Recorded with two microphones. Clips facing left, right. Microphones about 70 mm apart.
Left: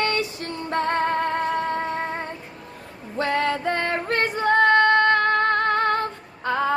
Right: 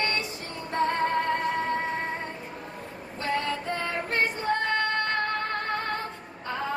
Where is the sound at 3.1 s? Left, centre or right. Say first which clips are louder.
Left 6 dB; left.